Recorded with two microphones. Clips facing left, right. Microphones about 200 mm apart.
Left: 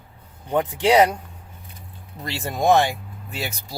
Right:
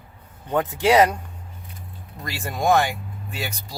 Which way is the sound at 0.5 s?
15° left (ahead or behind).